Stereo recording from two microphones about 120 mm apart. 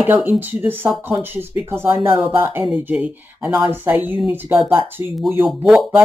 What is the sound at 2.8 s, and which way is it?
Speech, 10° right (ahead or behind).